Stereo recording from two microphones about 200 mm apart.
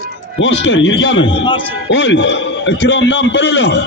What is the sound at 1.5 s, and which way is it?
Speech, 25° left (ahead or behind).